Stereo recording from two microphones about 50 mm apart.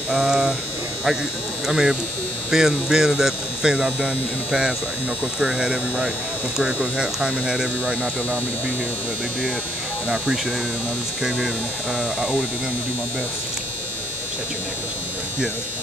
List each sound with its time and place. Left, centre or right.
0.2 s speech: centre
1.7 s speech: centre
12.0 s speech: centre